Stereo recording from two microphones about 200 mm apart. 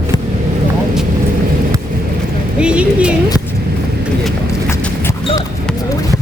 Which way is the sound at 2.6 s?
5° right (ahead or behind).